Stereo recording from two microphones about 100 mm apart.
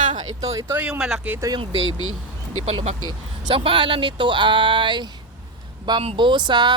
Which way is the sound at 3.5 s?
60° right (ahead or behind).